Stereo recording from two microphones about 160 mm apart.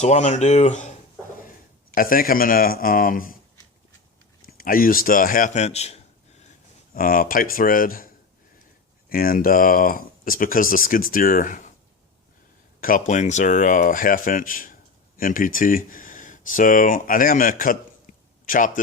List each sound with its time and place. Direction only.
0.0 s speech: 45° left (ahead or behind)
2.0 s speech: 65° left (ahead or behind)
4.4 s speech: 65° left (ahead or behind); by 6.0 s 40° left (ahead or behind)
6.9 s speech: 65° left (ahead or behind)
12.8 s speech: 55° left (ahead or behind)